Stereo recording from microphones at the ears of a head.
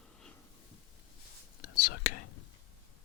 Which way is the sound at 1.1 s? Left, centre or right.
Left.